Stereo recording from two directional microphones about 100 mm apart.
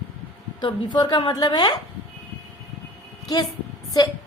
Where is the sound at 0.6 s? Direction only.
50° left (ahead or behind).